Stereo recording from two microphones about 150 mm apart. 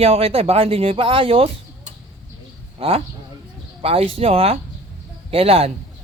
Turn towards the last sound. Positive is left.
turn(degrees=-40)  # may be behind; listen again after turning